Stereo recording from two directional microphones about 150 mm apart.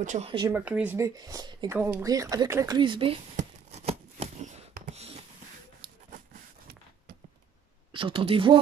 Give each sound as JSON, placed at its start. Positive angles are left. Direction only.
{"t": 0.0, "sound": "speech", "side_deg": -55}
{"t": 0.5, "sound": "speech", "side_deg": -10}
{"t": 1.7, "sound": "speech", "side_deg": -15}
{"t": 2.8, "sound": "speech", "side_deg": -35}
{"t": 3.3, "sound": "a sound", "side_deg": -45}
{"t": 7.9, "sound": "speech", "side_deg": -35}